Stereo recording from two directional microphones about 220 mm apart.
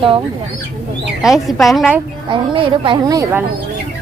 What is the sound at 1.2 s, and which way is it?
Speech, centre (ahead or behind).